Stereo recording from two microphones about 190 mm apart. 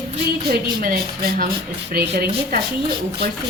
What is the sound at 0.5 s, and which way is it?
A woman's voice, 50° right (ahead or behind).